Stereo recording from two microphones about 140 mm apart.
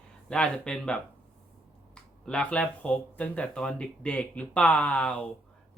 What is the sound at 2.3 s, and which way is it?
Speech, 10° left (ahead or behind).